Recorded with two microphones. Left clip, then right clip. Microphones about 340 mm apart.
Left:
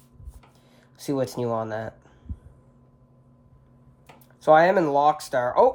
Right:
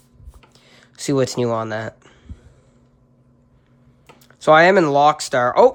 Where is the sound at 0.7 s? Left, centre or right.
Right.